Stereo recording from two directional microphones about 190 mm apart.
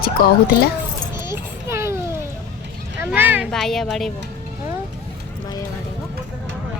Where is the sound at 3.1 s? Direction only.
10° right (ahead or behind).